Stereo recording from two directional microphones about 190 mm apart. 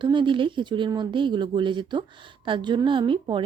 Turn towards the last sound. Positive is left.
turn(degrees=-25)  # may be behind; listen again after turning